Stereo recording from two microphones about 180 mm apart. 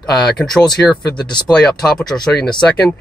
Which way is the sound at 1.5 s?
5° left (ahead or behind).